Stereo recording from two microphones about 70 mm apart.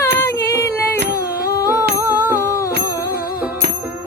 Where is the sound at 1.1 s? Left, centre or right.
Left.